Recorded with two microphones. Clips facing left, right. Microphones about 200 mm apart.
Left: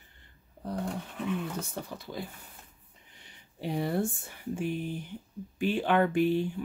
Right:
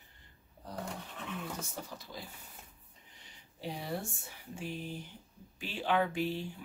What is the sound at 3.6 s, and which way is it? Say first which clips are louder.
Speech: left 9 dB; 60° left (ahead or behind).